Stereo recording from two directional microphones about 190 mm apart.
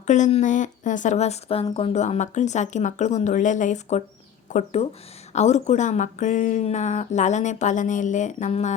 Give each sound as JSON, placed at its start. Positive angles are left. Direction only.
{"t": 0.1, "sound": "speech", "side_deg": 35}